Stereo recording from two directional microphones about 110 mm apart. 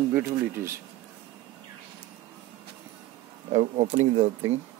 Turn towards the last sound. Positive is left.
turn(degrees=-90)